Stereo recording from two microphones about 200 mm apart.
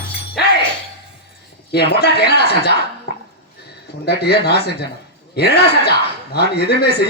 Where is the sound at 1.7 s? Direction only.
55° left (ahead or behind).